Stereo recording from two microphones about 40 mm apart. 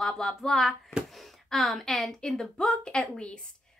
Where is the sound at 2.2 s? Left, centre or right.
Centre.